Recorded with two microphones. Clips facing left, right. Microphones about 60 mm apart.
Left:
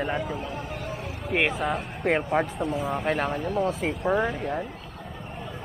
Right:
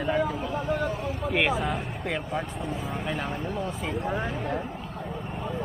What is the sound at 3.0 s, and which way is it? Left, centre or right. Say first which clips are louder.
Speech: left 6 dB; left.